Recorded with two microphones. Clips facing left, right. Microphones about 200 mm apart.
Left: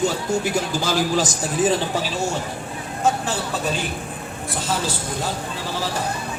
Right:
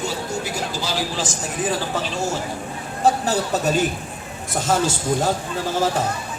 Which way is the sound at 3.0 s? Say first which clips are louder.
Right 3 dB; 40° right (ahead or behind).